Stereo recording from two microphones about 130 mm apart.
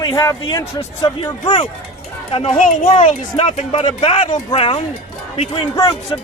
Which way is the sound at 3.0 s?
60° left (ahead or behind).